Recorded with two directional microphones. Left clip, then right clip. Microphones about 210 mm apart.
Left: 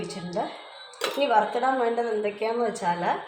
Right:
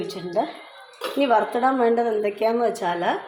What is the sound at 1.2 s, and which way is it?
Speech, 40° right (ahead or behind).